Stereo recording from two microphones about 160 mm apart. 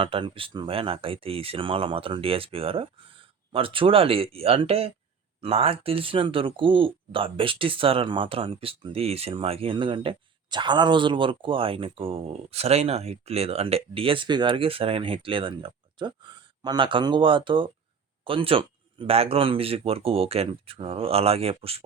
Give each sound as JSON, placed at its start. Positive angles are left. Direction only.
{"t": 0.0, "sound": "speech", "side_deg": -35}